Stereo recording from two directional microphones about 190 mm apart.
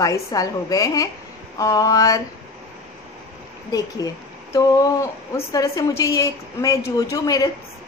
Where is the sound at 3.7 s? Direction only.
20° left (ahead or behind).